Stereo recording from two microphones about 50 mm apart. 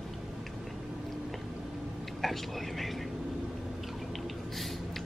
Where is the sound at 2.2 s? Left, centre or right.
Centre.